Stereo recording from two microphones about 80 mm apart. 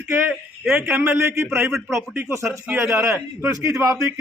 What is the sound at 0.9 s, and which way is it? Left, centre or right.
A man's voice, right.